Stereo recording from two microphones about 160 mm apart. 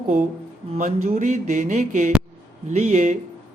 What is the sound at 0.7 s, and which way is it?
Speech, 45° right (ahead or behind).